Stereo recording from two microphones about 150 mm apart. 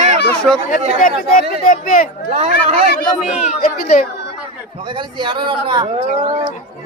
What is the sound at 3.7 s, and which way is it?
Speech, 65° left (ahead or behind).